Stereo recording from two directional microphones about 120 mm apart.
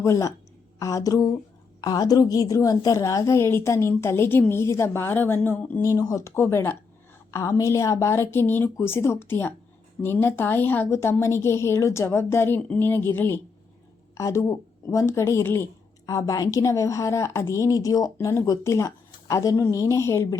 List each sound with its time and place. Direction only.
0.0 s a woman's voice: 25° left (ahead or behind)
6.0 s a woman's voice: 30° left (ahead or behind)